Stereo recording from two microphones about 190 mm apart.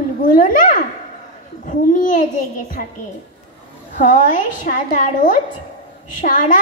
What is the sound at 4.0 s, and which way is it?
Speech, 45° left (ahead or behind).